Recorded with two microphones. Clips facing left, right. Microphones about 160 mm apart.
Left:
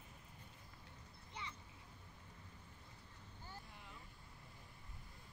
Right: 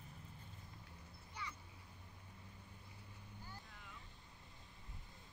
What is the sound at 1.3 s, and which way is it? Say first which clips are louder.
Vehicle: right 1 dB; 25° left (ahead or behind).